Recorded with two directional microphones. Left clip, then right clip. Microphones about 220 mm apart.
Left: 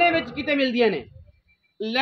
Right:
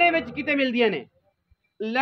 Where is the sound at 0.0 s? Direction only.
5° right (ahead or behind).